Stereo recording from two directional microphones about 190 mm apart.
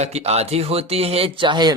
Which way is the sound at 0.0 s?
35° right (ahead or behind).